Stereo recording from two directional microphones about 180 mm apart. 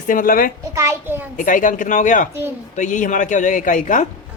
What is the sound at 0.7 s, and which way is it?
Speech, 15° right (ahead or behind).